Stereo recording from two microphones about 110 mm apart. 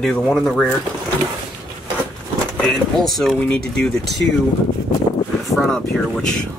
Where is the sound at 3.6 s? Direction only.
5° left (ahead or behind).